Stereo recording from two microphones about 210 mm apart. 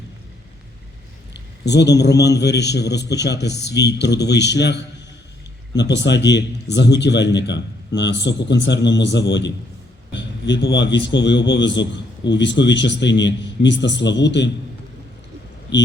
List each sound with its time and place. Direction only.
1.3 s a man's voice: 55° left (ahead or behind)